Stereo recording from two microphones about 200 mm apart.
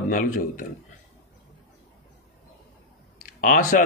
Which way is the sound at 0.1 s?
45° left (ahead or behind).